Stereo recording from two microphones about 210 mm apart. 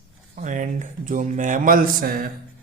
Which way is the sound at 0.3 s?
35° right (ahead or behind).